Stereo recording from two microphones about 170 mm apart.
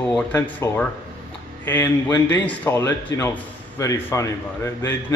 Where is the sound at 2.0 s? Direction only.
10° left (ahead or behind).